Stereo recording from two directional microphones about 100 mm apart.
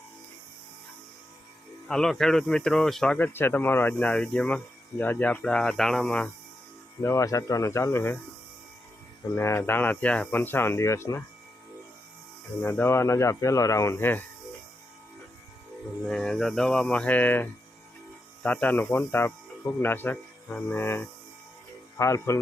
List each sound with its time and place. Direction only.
1.9 s speech: 5° left (ahead or behind)
3.2 s speech: 20° left (ahead or behind)
7.0 s speech: 30° left (ahead or behind)
9.4 s speech: 25° left (ahead or behind)
12.6 s speech: 20° left (ahead or behind)
16.0 s speech: 5° left (ahead or behind); by 22.4 s 30° left (ahead or behind)